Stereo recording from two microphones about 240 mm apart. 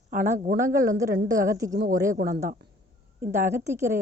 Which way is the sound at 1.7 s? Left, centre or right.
Right.